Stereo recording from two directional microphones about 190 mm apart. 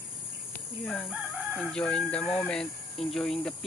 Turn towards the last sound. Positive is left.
turn(degrees=5)  # may be behind; listen again after turning